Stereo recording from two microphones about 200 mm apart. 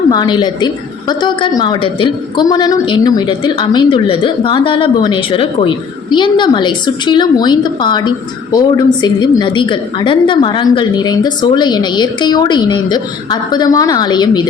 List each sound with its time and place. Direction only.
0.1 s a woman's voice: 20° left (ahead or behind)